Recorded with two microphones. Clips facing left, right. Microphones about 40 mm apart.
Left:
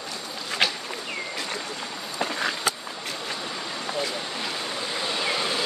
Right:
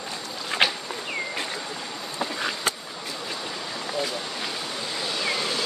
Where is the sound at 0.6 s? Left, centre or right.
Right.